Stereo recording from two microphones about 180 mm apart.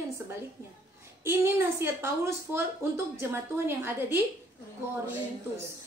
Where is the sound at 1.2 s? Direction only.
15° right (ahead or behind).